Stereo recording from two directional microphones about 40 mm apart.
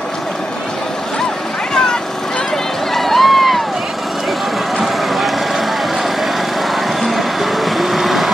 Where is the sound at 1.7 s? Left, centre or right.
Centre.